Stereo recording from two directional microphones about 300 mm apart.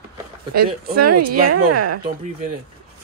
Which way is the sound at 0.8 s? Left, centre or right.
Right.